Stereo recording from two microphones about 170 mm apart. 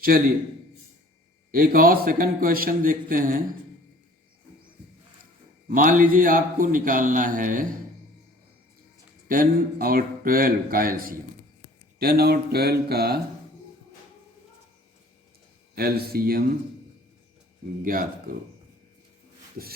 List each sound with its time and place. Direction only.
0.1 s speech: 60° right (ahead or behind)
1.5 s speech: 60° right (ahead or behind)
5.6 s a man's voice: 50° right (ahead or behind)
9.2 s speech: 55° right (ahead or behind)
15.7 s speech: 60° right (ahead or behind)
18.3 s speech: 55° right (ahead or behind)